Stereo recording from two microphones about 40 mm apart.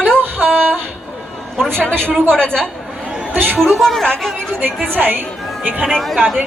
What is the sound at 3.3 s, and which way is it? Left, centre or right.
Speech, right.